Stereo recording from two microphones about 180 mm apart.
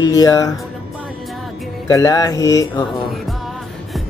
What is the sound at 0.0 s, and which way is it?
Speech, 20° left (ahead or behind).